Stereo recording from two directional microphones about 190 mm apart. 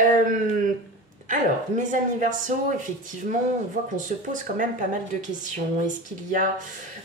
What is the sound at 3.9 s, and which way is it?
Speech, 45° right (ahead or behind).